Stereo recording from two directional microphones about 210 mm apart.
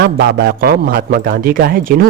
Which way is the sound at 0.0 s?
45° right (ahead or behind).